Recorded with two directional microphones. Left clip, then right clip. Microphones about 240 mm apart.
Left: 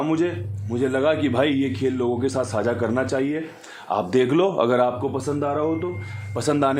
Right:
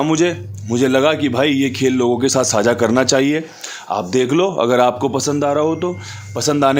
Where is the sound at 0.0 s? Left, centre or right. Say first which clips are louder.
Right 7 dB; right.